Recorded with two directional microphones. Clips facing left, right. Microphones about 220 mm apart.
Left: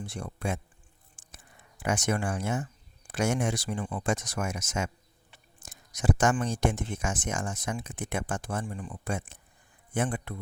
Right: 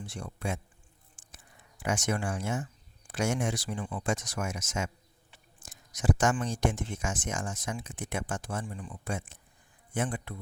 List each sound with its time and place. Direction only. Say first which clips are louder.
0.0 s speech: left 2 dB; 55° left (ahead or behind)
1.8 s speech: left 2 dB; 55° left (ahead or behind)